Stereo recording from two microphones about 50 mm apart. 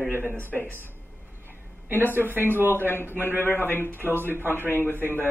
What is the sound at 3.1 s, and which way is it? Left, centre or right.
Speech, right.